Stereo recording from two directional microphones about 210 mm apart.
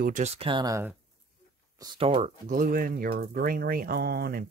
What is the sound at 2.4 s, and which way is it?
Speech, 40° right (ahead or behind).